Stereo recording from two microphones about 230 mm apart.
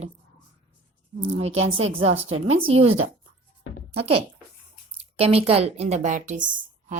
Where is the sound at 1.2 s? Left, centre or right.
Right.